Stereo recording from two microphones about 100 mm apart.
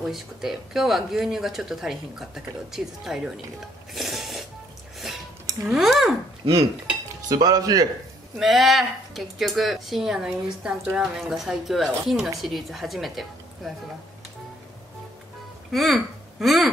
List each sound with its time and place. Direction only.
0.0 s speech: centre (ahead or behind)
3.9 s a sound: centre (ahead or behind)
5.7 s speech: centre (ahead or behind)
7.2 s speech: 40° right (ahead or behind)
8.4 s speech: centre (ahead or behind)
15.7 s speech: centre (ahead or behind)